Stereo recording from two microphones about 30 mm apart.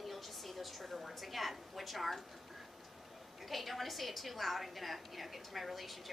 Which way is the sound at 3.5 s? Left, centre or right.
Centre.